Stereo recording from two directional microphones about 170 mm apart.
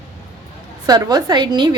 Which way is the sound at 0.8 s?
25° right (ahead or behind).